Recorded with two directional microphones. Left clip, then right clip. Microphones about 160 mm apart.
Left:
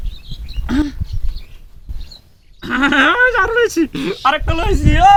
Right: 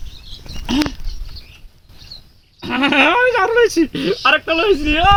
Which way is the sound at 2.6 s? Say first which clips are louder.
Left 1 dB; 15° left (ahead or behind).